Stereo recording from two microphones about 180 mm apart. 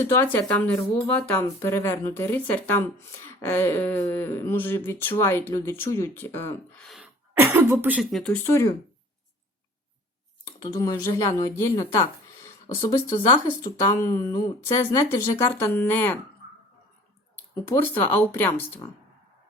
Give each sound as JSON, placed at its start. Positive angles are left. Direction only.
{"t": 0.0, "sound": "speech", "side_deg": 15}
{"t": 7.7, "sound": "speech", "side_deg": -10}
{"t": 8.1, "sound": "speech", "side_deg": 0}
{"t": 8.4, "sound": "speech", "side_deg": 15}
{"t": 10.4, "sound": "speech", "side_deg": 20}
{"t": 17.3, "sound": "speech", "side_deg": 10}